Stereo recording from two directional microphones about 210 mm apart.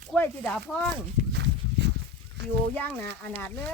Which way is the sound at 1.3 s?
55° right (ahead or behind).